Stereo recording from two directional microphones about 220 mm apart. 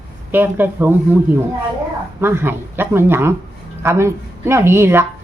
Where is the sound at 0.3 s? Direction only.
10° right (ahead or behind).